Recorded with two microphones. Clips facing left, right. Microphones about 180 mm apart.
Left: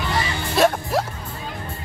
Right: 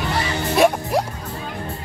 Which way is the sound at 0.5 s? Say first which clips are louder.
Right 2 dB; 20° right (ahead or behind).